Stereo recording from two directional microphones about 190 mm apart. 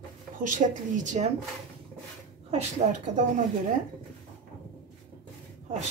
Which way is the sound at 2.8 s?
35° right (ahead or behind).